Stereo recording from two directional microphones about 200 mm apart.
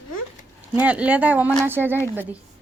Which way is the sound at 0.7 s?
5° right (ahead or behind).